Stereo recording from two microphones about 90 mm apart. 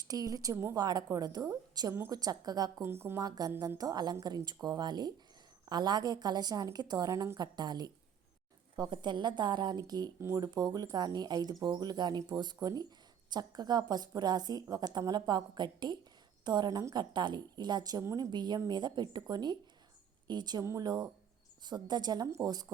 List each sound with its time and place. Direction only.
0.0 s a woman's voice: 45° right (ahead or behind)
0.8 s a woman's voice: 50° right (ahead or behind)
2.8 s speech: 25° right (ahead or behind)
3.2 s a woman's voice: 45° right (ahead or behind)
10.2 s speech: 30° right (ahead or behind)
10.4 s a woman's voice: 50° right (ahead or behind)
18.0 s a woman's voice: 35° right (ahead or behind)
18.3 s a woman's voice: 55° right (ahead or behind)